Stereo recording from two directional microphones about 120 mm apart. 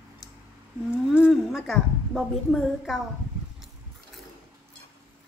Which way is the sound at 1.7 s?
5° left (ahead or behind).